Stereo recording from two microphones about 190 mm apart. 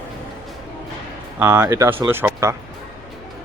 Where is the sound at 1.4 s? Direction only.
15° right (ahead or behind).